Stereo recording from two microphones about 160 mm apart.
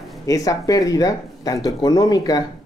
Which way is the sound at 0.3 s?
20° left (ahead or behind).